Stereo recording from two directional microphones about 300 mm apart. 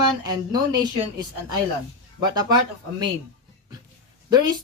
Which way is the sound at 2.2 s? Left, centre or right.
Centre.